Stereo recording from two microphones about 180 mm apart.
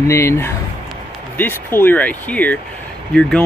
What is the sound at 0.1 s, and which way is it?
Speech, 15° left (ahead or behind).